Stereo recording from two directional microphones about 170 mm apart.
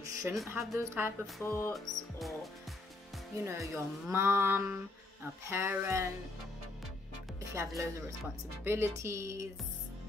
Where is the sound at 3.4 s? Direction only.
15° right (ahead or behind).